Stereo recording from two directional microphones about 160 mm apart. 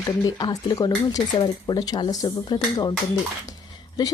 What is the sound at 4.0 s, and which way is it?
Speech, 25° left (ahead or behind).